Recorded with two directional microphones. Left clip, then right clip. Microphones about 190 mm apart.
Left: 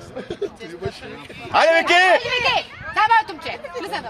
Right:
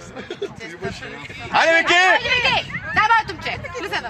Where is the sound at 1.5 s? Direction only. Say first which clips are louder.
Even; 60° left (ahead or behind).